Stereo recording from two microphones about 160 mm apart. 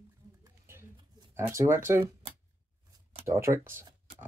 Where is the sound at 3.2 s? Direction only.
15° right (ahead or behind).